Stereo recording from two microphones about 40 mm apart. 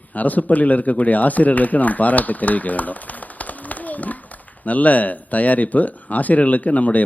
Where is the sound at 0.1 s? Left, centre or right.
Left.